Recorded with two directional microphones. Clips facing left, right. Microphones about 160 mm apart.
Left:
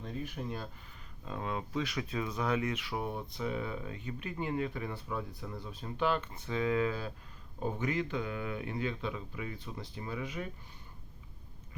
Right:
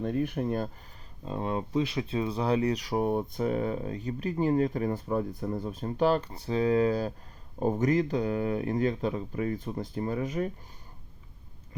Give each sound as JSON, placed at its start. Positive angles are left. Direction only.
{"t": 0.0, "sound": "speech", "side_deg": -55}
{"t": 1.2, "sound": "speech", "side_deg": -30}